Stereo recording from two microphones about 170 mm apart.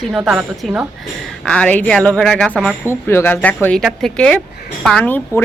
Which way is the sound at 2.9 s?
15° left (ahead or behind).